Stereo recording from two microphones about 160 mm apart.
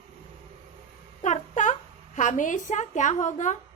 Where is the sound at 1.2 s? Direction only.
50° left (ahead or behind).